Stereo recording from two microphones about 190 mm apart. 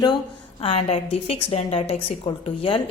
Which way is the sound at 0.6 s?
30° left (ahead or behind).